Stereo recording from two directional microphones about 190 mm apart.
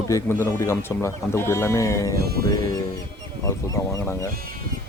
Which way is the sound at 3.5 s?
15° left (ahead or behind).